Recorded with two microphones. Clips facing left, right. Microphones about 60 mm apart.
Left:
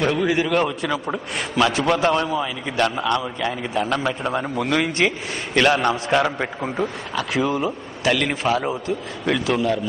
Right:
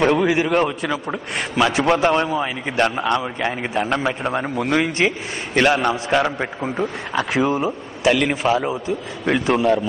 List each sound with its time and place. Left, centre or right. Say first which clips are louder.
0.2 s a man's voice: right 2 dB; centre
4.0 s a man's voice: right 1 dB; centre
6.1 s a man's voice: right 1 dB; centre
7.2 s a man's voice: right 3 dB; right